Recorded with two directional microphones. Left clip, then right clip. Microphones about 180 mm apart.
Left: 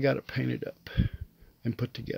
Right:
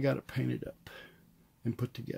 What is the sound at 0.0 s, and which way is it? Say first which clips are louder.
Speech: left 5 dB; 30° left (ahead or behind).